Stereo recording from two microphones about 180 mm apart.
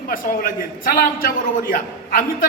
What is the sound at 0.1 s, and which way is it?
A man's voice, 55° left (ahead or behind).